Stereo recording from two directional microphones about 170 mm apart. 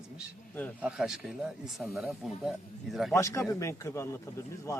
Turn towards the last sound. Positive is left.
turn(degrees=15)  # may be behind; listen again after turning